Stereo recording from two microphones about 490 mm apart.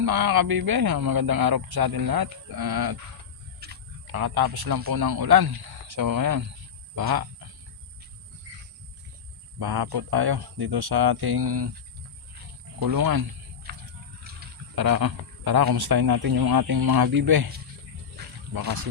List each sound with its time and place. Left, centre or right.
0.0 s speech: right
3.6 s wild animals: centre
4.0 s speech: right
9.6 s speech: right
12.8 s speech: right
14.3 s a sound: centre
14.8 s speech: right
18.5 s speech: right